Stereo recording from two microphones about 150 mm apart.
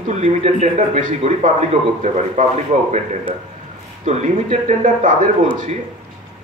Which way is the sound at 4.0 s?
45° right (ahead or behind).